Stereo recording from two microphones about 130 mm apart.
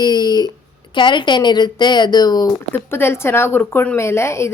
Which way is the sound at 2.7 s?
20° left (ahead or behind).